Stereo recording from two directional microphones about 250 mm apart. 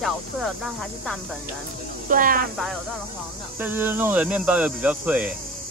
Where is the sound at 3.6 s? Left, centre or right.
Centre.